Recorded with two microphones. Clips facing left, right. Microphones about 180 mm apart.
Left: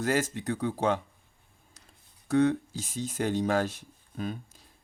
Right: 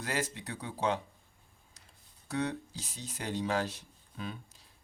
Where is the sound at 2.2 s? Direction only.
50° left (ahead or behind).